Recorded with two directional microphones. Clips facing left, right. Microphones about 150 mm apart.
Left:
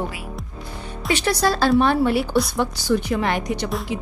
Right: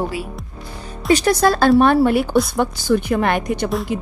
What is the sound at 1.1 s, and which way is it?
A woman's voice, 50° right (ahead or behind).